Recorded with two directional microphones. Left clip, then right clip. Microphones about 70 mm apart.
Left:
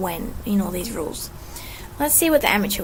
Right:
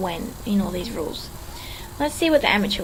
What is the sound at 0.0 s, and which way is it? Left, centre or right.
A woman's voice, left.